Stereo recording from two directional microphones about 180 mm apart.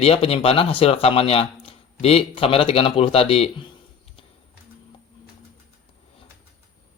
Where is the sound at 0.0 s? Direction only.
35° left (ahead or behind).